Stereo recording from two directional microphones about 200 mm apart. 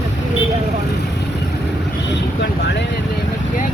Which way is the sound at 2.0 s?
60° left (ahead or behind).